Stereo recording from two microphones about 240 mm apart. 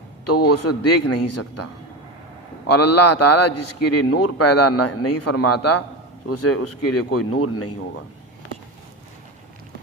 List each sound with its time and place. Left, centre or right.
0.4 s speech: left
2.6 s a man's voice: left
6.2 s speech: left